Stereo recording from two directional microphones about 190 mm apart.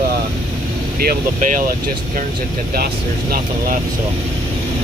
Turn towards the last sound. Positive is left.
turn(degrees=-50)  # may be behind; listen again after turning